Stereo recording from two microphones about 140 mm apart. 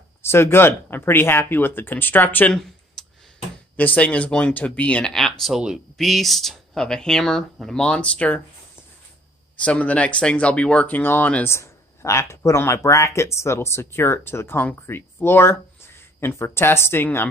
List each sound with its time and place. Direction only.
0.2 s speech: 15° left (ahead or behind)
9.6 s speech: 10° left (ahead or behind)